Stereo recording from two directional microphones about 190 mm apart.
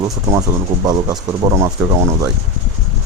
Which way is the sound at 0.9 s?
20° right (ahead or behind).